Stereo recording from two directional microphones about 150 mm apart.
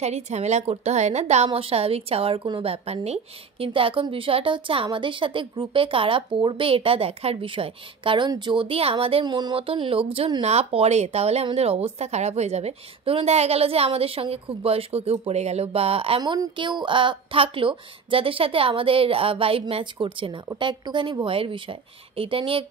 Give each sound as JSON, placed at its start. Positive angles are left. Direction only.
{"t": 0.0, "sound": "a woman's voice", "side_deg": -45}
{"t": 16.2, "sound": "a woman's voice", "side_deg": -30}